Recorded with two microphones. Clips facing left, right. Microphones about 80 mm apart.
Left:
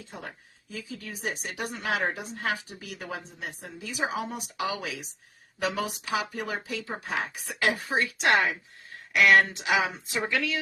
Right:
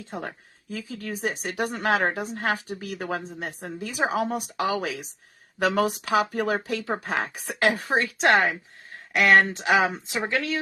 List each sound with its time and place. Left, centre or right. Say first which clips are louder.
0.0 s speech: right 7 dB; right
10.1 s speech: right 2 dB; right